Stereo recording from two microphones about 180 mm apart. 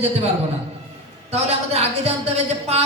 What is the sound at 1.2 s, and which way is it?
A man's voice, 35° right (ahead or behind).